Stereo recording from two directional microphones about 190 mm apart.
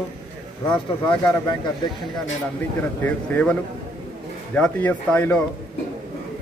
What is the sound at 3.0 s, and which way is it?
A man's voice, 5° left (ahead or behind).